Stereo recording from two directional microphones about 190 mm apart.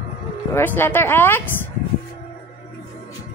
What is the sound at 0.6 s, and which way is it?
Speech, 10° left (ahead or behind).